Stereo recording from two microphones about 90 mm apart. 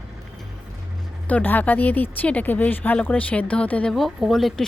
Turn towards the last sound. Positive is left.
turn(degrees=0)  # may be behind; listen again after turning